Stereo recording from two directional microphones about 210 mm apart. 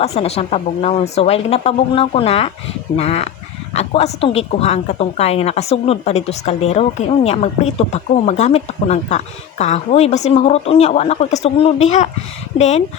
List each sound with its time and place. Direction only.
0.0 s a woman's voice: 30° left (ahead or behind)